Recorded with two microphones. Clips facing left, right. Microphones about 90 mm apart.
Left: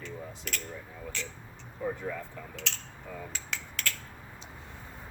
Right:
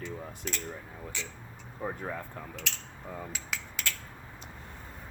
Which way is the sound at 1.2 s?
15° right (ahead or behind).